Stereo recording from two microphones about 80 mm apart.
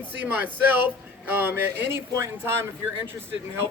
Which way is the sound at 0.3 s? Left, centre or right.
Right.